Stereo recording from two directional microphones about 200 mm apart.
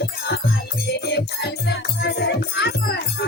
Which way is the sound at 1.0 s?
55° left (ahead or behind).